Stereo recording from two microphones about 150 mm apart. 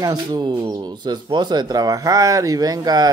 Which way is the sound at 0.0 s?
30° right (ahead or behind).